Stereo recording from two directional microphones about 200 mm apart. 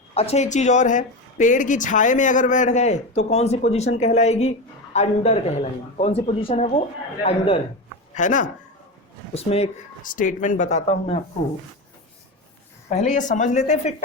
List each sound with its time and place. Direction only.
0.1 s speech: 30° left (ahead or behind)
12.9 s speech: 35° left (ahead or behind)